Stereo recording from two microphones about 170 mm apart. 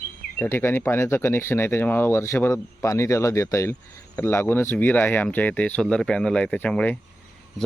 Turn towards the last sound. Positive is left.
turn(degrees=5)  # may be behind; listen again after turning